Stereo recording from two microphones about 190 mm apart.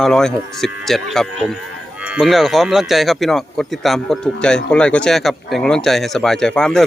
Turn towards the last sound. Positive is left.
turn(degrees=5)  # may be behind; listen again after turning